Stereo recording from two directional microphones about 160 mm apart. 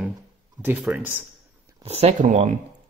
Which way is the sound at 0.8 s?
10° right (ahead or behind).